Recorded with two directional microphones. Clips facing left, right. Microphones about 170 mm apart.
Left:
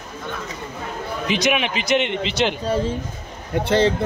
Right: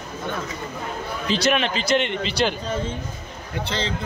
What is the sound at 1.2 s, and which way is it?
A man's voice, 15° left (ahead or behind).